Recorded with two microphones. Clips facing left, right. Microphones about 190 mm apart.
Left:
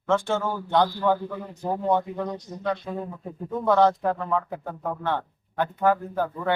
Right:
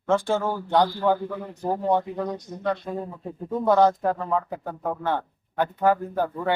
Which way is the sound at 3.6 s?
10° right (ahead or behind).